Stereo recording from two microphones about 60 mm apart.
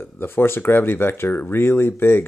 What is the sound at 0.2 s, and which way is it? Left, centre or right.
Speech, left.